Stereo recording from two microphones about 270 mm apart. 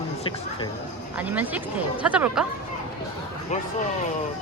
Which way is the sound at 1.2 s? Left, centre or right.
Centre.